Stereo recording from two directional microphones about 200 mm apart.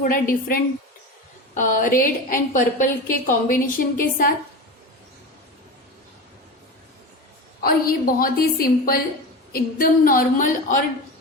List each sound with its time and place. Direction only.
0.0 s a woman's voice: 45° left (ahead or behind)
7.6 s a woman's voice: 45° left (ahead or behind)